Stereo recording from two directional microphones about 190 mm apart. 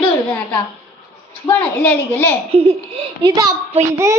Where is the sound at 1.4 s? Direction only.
10° left (ahead or behind).